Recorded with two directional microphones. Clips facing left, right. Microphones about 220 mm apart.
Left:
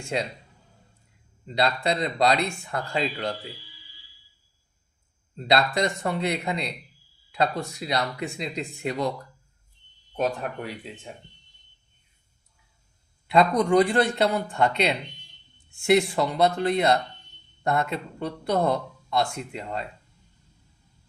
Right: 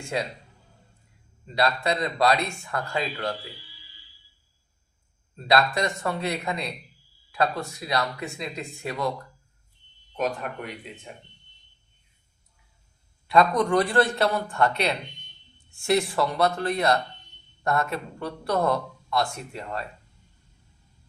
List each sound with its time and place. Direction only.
1.5 s a man's voice: 25° left (ahead or behind)
5.4 s a man's voice: 20° left (ahead or behind)
13.3 s a man's voice: 15° left (ahead or behind)